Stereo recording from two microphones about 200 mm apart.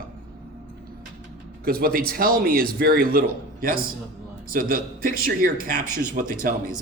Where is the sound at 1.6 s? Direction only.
50° right (ahead or behind).